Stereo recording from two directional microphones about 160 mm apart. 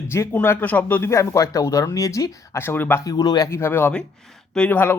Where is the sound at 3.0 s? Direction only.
25° left (ahead or behind).